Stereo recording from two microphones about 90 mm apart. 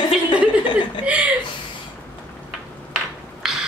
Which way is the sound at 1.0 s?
15° right (ahead or behind).